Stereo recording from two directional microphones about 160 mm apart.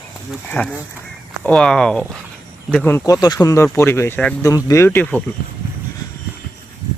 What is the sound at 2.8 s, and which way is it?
Speech, 20° left (ahead or behind).